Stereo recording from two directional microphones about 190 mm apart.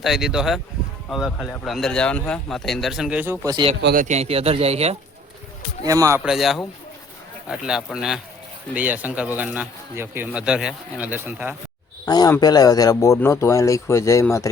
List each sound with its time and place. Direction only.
0.0 s a man's voice: centre (ahead or behind)
3.4 s speech: 20° right (ahead or behind)
3.9 s speech: 40° right (ahead or behind)
5.8 s speech: 20° right (ahead or behind)
6.2 s a man's voice: centre (ahead or behind)
12.0 s a man's voice: 20° left (ahead or behind)